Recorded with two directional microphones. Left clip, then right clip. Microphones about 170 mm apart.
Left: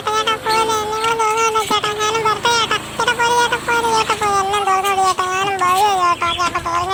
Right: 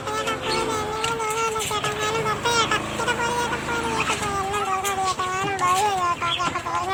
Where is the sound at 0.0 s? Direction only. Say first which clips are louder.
Left 8 dB; 40° left (ahead or behind).